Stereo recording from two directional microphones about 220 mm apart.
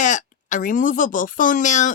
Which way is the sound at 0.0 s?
35° left (ahead or behind).